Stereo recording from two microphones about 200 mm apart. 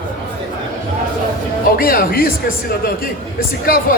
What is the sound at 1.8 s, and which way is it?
Speech, 45° left (ahead or behind).